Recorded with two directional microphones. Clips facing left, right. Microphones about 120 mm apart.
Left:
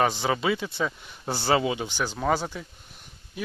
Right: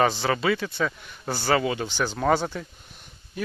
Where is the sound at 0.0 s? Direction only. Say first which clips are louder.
Right 2 dB; 10° left (ahead or behind).